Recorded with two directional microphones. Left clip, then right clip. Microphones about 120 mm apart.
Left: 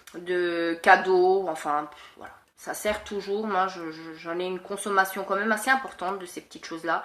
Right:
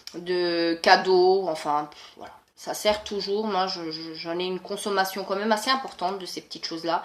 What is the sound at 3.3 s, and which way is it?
A man's voice, 25° right (ahead or behind).